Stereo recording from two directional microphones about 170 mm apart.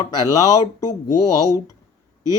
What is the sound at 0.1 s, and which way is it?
Speech, 20° left (ahead or behind).